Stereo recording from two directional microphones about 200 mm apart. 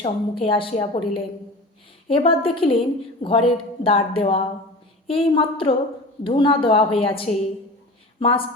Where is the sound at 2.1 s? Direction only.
25° left (ahead or behind).